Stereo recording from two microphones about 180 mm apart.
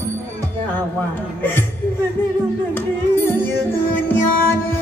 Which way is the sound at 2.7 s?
10° left (ahead or behind).